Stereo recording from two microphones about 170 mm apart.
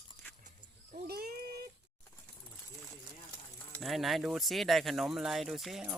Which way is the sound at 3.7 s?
Centre (ahead or behind).